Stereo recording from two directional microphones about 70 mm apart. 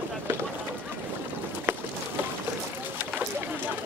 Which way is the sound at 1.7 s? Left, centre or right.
Right.